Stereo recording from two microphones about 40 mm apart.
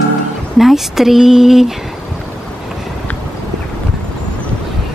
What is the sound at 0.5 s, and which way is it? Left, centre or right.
Speech, centre.